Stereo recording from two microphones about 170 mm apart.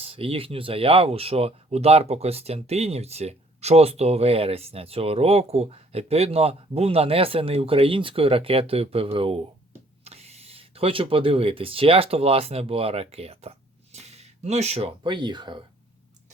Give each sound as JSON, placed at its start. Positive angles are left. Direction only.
{"t": 0.0, "sound": "speech", "side_deg": -35}